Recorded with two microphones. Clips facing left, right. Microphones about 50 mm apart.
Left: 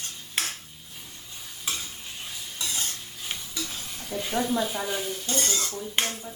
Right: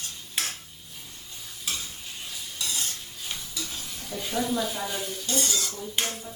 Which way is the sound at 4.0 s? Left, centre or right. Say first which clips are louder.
Left 2 dB; centre.